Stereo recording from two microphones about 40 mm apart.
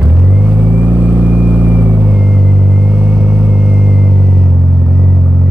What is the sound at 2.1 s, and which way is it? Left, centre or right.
Vehicle, centre.